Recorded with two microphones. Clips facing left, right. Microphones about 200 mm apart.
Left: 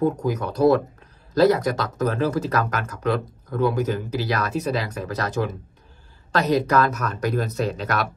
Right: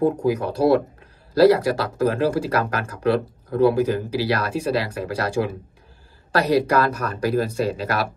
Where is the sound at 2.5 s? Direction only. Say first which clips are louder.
Right 1 dB; 30° right (ahead or behind).